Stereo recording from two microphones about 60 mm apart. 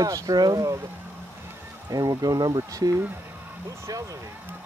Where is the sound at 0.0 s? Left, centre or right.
Right.